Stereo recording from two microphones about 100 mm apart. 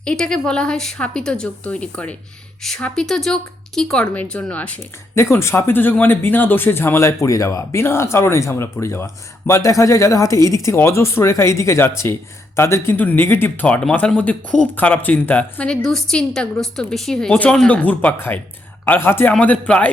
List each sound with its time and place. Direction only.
0.0 s speech: 10° left (ahead or behind)
5.1 s speech: 25° left (ahead or behind)